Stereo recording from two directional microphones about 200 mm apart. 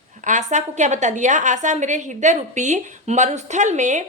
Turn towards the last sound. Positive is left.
turn(degrees=-35)  # may be behind; listen again after turning